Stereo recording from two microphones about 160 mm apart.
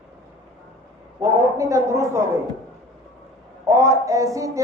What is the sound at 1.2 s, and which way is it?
A man's voice, 15° right (ahead or behind).